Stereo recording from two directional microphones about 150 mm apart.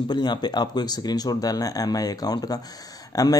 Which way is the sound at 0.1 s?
30° left (ahead or behind).